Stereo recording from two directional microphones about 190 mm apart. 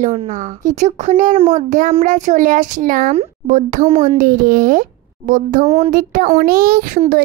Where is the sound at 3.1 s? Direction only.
35° right (ahead or behind).